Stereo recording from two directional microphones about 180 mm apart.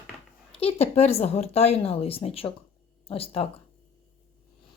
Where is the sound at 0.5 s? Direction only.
35° left (ahead or behind).